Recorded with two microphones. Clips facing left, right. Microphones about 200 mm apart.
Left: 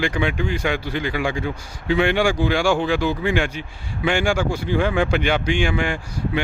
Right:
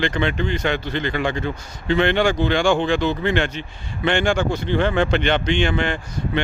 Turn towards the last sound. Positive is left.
turn(degrees=10)  # may be behind; listen again after turning